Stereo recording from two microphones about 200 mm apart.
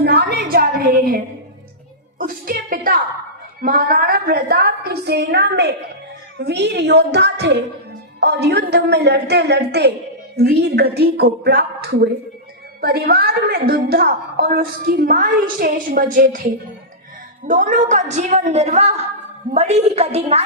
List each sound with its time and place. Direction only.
0.0 s a sound: 55° right (ahead or behind)
3.6 s a woman's voice: 45° right (ahead or behind)
17.4 s a woman's voice: 40° right (ahead or behind)